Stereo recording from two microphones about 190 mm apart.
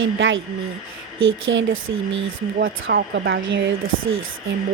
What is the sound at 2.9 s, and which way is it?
A woman's voice, 65° right (ahead or behind).